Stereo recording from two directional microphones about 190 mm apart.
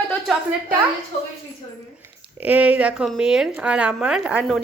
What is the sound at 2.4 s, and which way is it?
Speech, 10° right (ahead or behind).